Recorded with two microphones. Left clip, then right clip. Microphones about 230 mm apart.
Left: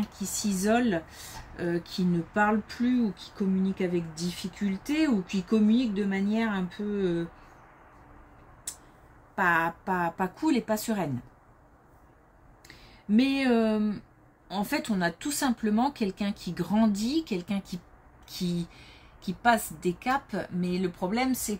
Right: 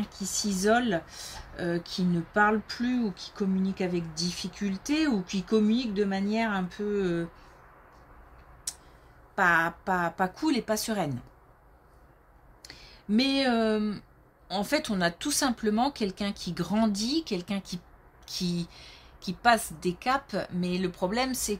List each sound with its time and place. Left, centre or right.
0.2 s speech: right
9.3 s speech: right
12.6 s speech: right